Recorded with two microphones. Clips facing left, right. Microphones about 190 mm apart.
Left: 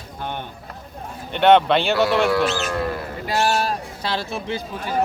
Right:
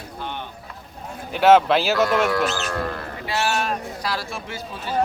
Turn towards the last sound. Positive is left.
turn(degrees=15)  # may be behind; listen again after turning